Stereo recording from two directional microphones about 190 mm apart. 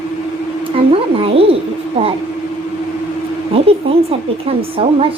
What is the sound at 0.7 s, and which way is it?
Speech, 30° right (ahead or behind).